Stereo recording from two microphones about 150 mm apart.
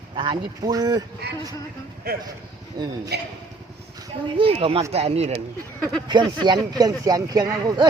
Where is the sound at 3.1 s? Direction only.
90° right.